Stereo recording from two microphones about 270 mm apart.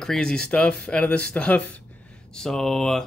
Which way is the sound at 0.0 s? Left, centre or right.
Centre.